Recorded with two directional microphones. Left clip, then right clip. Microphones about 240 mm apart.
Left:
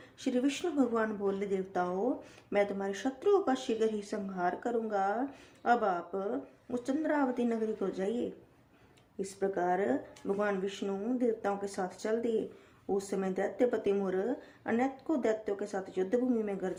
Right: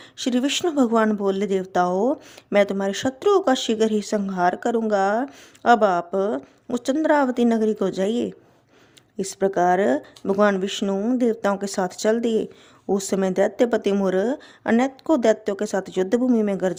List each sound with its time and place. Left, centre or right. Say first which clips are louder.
0.2 s speech: right 10 dB; right
9.4 s speech: right 12 dB; right